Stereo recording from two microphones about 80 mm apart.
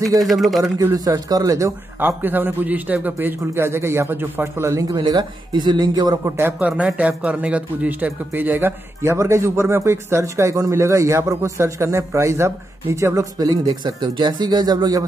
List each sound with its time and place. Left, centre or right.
0.2 s speech: centre
0.9 s speech: right
2.0 s a man's voice: right
4.9 s speech: right
6.2 s a man's voice: right
7.0 s a man's voice: centre; by 15.0 s right